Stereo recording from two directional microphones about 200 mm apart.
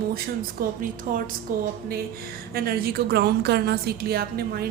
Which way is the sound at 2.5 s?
50° right (ahead or behind).